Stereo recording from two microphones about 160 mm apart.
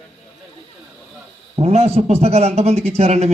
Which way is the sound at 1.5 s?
40° right (ahead or behind).